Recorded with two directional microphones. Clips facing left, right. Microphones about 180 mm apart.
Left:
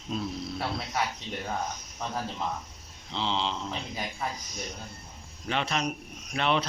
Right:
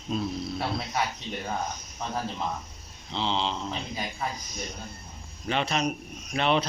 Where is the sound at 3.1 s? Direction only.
25° right (ahead or behind).